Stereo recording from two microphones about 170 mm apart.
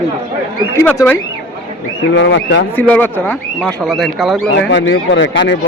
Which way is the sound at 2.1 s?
90° left.